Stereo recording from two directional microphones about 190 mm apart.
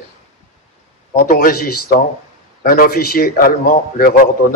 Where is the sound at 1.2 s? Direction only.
45° left (ahead or behind).